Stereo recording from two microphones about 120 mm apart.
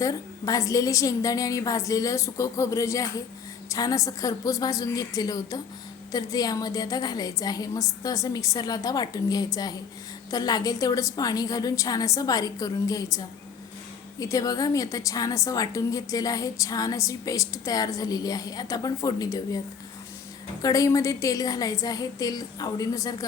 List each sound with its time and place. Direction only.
0.0 s a woman's voice: 30° left (ahead or behind)